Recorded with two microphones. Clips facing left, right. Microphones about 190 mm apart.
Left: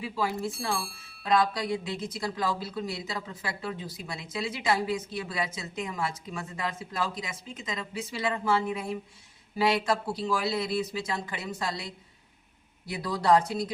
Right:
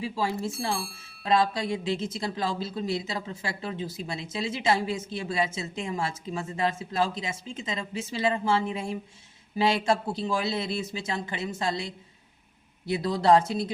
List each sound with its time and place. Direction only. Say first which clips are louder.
0.0 s a woman's voice: right 1 dB; 25° right (ahead or behind)
0.5 s speech: right 2 dB; centre (ahead or behind)
1.2 s a woman's voice: right 1 dB; 25° right (ahead or behind)